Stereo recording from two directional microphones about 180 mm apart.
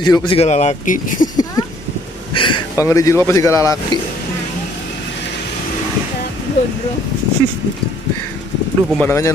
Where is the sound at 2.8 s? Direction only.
15° left (ahead or behind).